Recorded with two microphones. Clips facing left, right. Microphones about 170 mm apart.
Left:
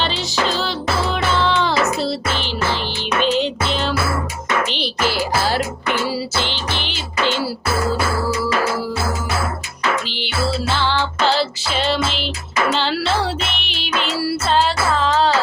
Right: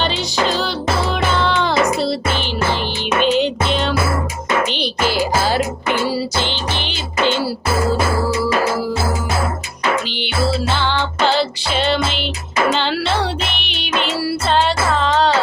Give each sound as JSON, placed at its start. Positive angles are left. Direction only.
{"t": 0.0, "sound": "music", "side_deg": 0}
{"t": 7.9, "sound": "music", "side_deg": -20}
{"t": 10.8, "sound": "music", "side_deg": 0}